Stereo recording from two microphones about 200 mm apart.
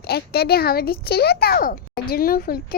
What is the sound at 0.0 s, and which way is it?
A child's voice, 50° left (ahead or behind).